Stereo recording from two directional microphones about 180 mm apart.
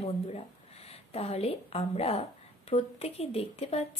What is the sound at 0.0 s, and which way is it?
A woman's voice, 35° left (ahead or behind).